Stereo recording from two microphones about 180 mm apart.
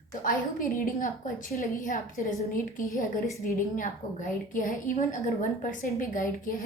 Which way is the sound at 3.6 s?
45° left (ahead or behind).